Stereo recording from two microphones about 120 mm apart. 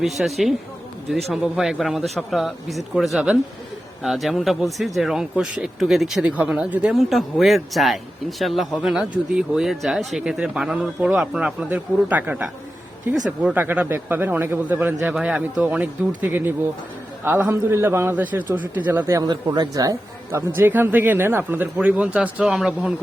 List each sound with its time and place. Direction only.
0.0 s speech: centre (ahead or behind); by 19.2 s 20° right (ahead or behind)
19.3 s speech: 35° right (ahead or behind)
20.6 s speech: 20° right (ahead or behind)